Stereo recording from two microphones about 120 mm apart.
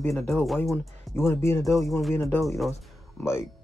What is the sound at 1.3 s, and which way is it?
Speech, 20° left (ahead or behind).